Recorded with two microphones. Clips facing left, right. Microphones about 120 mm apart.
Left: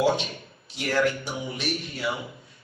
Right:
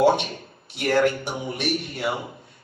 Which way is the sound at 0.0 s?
55° right (ahead or behind).